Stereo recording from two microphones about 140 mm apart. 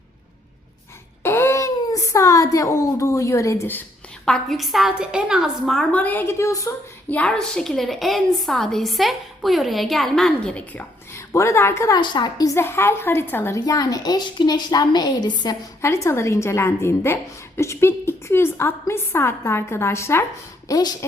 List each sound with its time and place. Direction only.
1.2 s speech: 15° left (ahead or behind)
4.3 s a woman's voice: centre (ahead or behind); by 11.9 s 20° left (ahead or behind)
11.9 s a woman's voice: 35° left (ahead or behind)